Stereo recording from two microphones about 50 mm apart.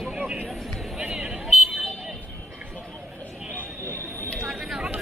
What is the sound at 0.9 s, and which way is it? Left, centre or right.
Music, centre.